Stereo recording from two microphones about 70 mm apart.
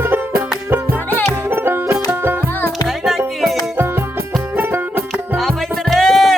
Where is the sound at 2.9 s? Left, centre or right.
Centre.